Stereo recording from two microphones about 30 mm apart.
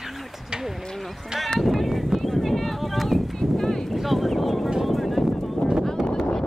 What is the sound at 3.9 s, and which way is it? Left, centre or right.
Boat, centre.